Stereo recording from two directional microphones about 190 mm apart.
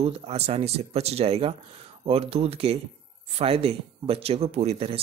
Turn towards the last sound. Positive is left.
turn(degrees=-30)  # may be behind; listen again after turning